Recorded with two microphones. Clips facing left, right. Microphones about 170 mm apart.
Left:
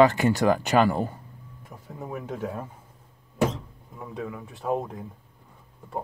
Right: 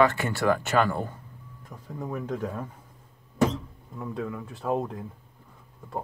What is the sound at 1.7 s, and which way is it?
Speech, 5° left (ahead or behind).